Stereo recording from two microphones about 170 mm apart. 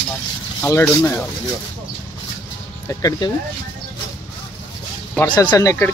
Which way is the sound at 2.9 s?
20° left (ahead or behind).